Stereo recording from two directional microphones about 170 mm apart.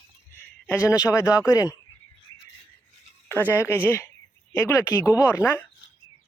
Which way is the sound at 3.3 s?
10° left (ahead or behind).